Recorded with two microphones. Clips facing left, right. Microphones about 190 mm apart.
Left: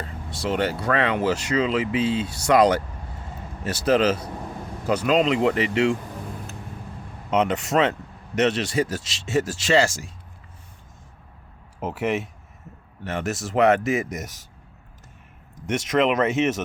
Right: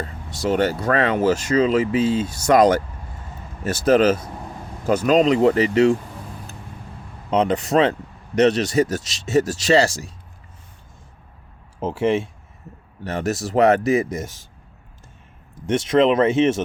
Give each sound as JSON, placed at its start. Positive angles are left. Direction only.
{"t": 0.3, "sound": "speech", "side_deg": -45}
{"t": 7.3, "sound": "speech", "side_deg": -35}
{"t": 11.8, "sound": "speech", "side_deg": -30}
{"t": 15.6, "sound": "speech", "side_deg": -30}